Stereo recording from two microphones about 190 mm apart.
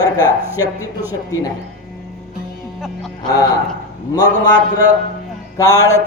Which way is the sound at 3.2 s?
20° left (ahead or behind).